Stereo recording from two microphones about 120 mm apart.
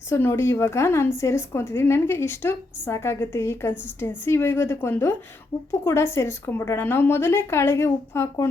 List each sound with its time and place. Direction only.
0.1 s a woman's voice: 20° left (ahead or behind)